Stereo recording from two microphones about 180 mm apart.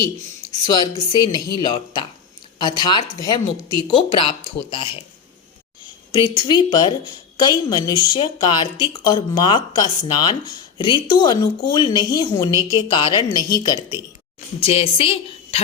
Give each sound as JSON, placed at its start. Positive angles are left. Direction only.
{"t": 0.6, "sound": "a woman's voice", "side_deg": 20}
{"t": 6.1, "sound": "a woman's voice", "side_deg": 25}
{"t": 14.6, "sound": "a woman's voice", "side_deg": 30}